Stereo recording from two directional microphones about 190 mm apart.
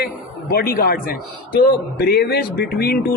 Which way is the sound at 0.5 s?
50° left (ahead or behind).